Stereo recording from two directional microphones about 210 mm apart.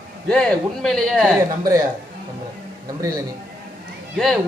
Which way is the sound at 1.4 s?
15° right (ahead or behind).